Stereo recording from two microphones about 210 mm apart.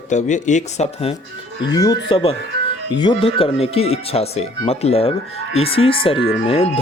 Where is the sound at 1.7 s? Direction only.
15° left (ahead or behind).